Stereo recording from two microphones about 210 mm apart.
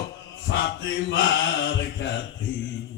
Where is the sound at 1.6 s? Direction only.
60° left (ahead or behind).